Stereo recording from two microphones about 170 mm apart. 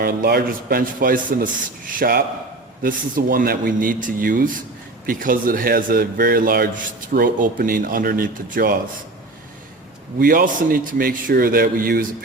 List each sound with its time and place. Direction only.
0.0 s a man's voice: 60° right (ahead or behind)
10.2 s a man's voice: 55° right (ahead or behind)